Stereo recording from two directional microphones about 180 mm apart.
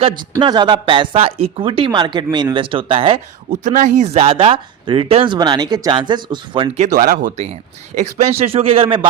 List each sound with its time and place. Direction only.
0.0 s speech: 25° right (ahead or behind)
3.5 s speech: 45° right (ahead or behind); by 6.7 s 25° right (ahead or behind)
6.7 s speech: 45° right (ahead or behind)